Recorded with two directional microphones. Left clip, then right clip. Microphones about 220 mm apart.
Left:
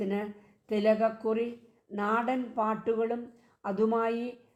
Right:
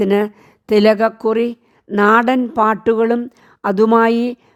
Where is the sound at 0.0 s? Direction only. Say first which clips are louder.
Right 18 dB; 50° right (ahead or behind).